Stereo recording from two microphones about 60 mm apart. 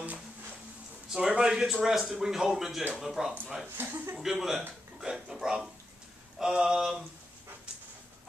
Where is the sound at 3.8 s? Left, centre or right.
Right.